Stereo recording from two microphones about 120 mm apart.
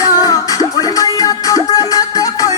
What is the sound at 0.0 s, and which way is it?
Music, 30° left (ahead or behind).